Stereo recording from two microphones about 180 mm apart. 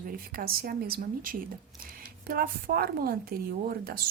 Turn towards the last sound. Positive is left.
turn(degrees=-55)  # may be behind; listen again after turning